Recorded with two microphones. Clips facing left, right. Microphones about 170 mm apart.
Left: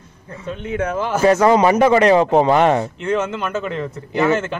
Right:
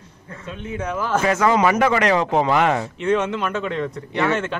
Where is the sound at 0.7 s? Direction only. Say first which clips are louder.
Left 5 dB; 65° left (ahead or behind).